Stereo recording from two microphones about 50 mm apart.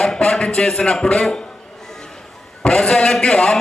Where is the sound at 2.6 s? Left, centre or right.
Centre.